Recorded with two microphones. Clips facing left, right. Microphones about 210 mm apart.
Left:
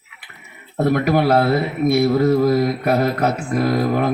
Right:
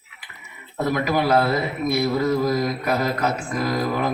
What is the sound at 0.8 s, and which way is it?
Speech, 60° left (ahead or behind).